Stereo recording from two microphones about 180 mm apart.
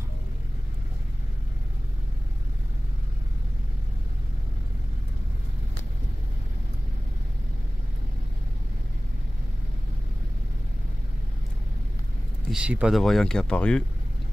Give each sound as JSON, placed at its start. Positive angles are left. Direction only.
{"t": 12.4, "sound": "speech", "side_deg": -5}